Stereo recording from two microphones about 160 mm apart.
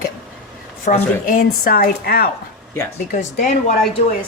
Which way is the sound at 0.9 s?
55° left (ahead or behind).